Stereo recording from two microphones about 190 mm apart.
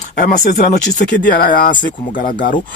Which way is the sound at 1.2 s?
50° left (ahead or behind).